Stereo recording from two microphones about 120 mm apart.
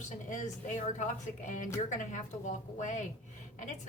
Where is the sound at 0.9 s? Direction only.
90° left.